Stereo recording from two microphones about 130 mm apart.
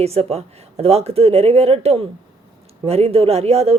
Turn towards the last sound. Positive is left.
turn(degrees=-55)  # may be behind; listen again after turning